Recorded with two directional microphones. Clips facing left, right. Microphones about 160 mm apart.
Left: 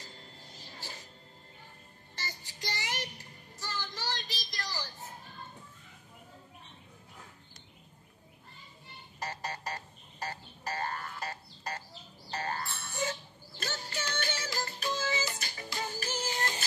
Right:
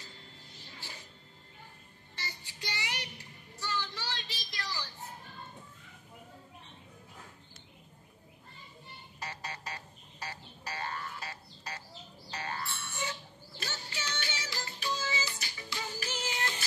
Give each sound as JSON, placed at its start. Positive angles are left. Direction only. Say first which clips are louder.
{"t": 0.0, "sound": "a sound", "louder": "left 2 dB", "side_deg": 40}
{"t": 2.1, "sound": "child singing", "louder": "left 1 dB", "side_deg": 40}
{"t": 9.2, "sound": "music", "louder": "left 4 dB", "side_deg": 45}